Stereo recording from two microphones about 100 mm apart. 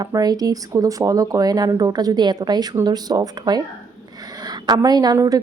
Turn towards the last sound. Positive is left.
turn(degrees=-40)  # may be behind; listen again after turning